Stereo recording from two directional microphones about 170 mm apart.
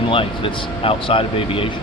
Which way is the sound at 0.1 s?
30° left (ahead or behind).